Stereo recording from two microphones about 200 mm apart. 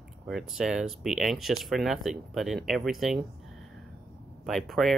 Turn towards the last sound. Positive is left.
turn(degrees=0)  # may be behind; listen again after turning